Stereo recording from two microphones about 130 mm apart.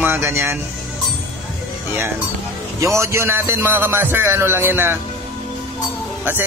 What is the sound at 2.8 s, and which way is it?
Music, 20° right (ahead or behind).